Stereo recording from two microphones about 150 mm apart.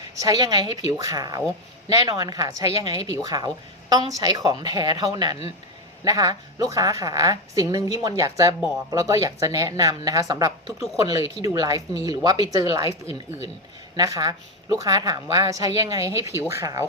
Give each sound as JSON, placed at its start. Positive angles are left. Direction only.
{"t": 0.2, "sound": "a woman's voice", "side_deg": -25}
{"t": 13.9, "sound": "a woman's voice", "side_deg": -25}